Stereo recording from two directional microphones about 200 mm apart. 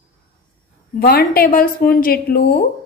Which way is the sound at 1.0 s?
50° left (ahead or behind).